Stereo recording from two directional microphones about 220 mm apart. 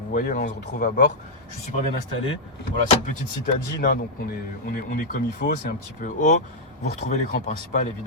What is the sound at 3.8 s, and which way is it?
Speech, 40° left (ahead or behind).